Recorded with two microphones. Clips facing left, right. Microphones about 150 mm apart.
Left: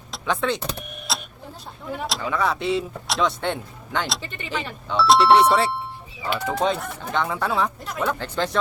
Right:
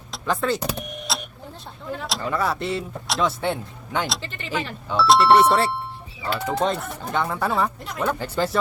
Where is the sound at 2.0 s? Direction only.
Centre (ahead or behind).